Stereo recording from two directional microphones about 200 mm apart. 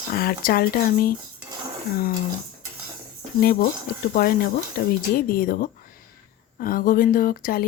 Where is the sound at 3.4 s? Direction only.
50° left (ahead or behind).